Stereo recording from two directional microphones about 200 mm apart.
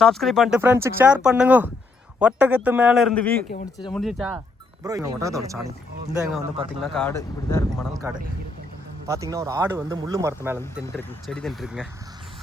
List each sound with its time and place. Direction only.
0.0 s speech: centre (ahead or behind)
4.8 s speech: 15° right (ahead or behind)
6.9 s speech: 10° left (ahead or behind)
8.0 s speech: 15° right (ahead or behind)
10.9 s speech: centre (ahead or behind)